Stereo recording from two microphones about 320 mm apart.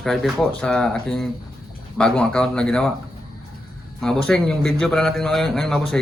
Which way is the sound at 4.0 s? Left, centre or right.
Centre.